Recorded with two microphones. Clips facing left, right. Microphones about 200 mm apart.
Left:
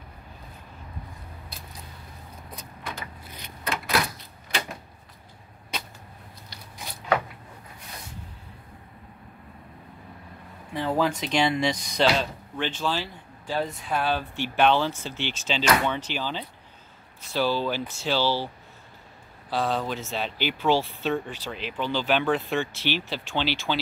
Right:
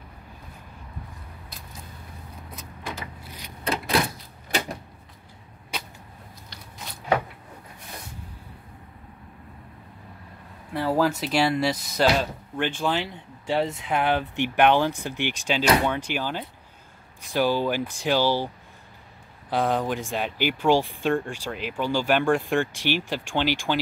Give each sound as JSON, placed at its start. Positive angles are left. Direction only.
{"t": 3.6, "sound": "door", "side_deg": -30}
{"t": 10.7, "sound": "speech", "side_deg": -5}
{"t": 19.5, "sound": "speech", "side_deg": -15}